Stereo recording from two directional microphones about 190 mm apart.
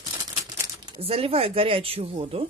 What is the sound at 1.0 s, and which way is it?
Speech, 30° right (ahead or behind).